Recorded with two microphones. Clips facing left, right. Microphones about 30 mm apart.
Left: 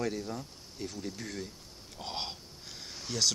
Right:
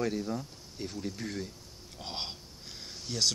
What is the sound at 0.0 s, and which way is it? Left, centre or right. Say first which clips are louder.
Speech: right 2 dB; centre.